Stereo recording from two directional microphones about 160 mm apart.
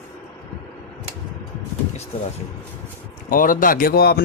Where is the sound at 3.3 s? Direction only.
60° left (ahead or behind); by 4.2 s 75° left (ahead or behind).